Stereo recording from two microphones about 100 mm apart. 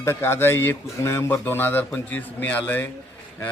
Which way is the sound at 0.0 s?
25° left (ahead or behind).